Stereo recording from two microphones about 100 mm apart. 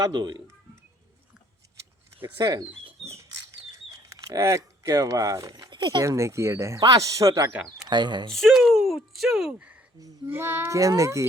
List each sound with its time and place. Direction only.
0.0 s speech: 45° right (ahead or behind)
2.1 s speech: 20° right (ahead or behind)
3.0 s bird: centre (ahead or behind)
4.1 s speech: 30° right (ahead or behind)
5.5 s speech: 50° right (ahead or behind)
6.0 s speech: 30° right (ahead or behind)
7.5 s speech: 5° right (ahead or behind)
7.9 s speech: 45° right (ahead or behind)
8.3 s speech: 5° left (ahead or behind)
10.2 s child singing: 20° right (ahead or behind)
10.7 s speech: 35° right (ahead or behind)